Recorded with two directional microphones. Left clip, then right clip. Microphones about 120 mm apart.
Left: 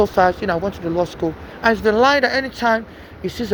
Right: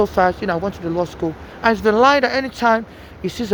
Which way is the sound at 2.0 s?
35° right (ahead or behind).